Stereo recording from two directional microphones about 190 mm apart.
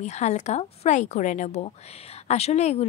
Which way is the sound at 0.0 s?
35° left (ahead or behind).